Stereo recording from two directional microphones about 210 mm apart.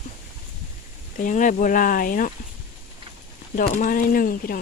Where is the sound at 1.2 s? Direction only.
40° left (ahead or behind).